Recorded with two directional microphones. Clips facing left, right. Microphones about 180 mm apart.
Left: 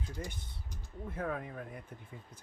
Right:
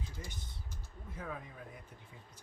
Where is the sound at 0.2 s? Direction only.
60° left (ahead or behind).